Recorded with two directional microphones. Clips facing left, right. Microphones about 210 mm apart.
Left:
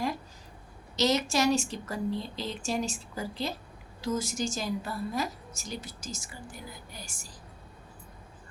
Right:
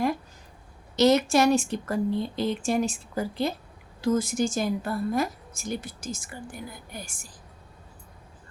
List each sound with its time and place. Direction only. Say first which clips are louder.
0.9 s speech: right 7 dB; 55° right (ahead or behind)